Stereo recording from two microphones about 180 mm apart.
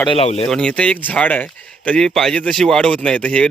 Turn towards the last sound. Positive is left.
turn(degrees=5)  # may be behind; listen again after turning